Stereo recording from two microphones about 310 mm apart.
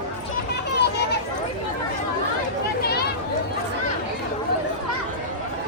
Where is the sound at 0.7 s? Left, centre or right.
Left.